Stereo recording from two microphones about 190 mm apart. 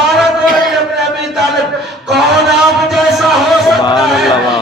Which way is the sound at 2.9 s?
Centre (ahead or behind).